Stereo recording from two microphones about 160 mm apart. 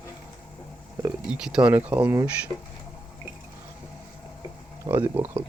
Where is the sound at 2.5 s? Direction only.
25° left (ahead or behind).